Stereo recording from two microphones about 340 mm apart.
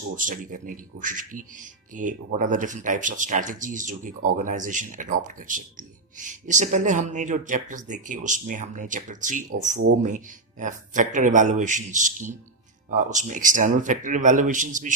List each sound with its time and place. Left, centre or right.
0.2 s speech: right